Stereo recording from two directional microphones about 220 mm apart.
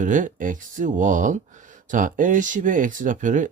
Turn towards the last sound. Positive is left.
turn(degrees=-35)  # may be behind; listen again after turning